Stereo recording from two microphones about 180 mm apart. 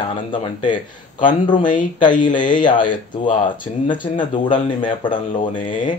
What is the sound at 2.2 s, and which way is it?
Speech, 25° left (ahead or behind).